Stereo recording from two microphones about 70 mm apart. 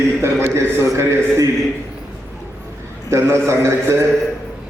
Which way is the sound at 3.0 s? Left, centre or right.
Right.